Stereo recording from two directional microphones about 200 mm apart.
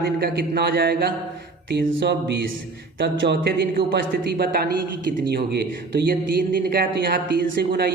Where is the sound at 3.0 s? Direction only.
60° right (ahead or behind).